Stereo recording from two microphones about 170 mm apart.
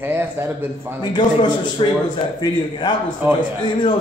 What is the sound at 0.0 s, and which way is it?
Speech, 15° right (ahead or behind).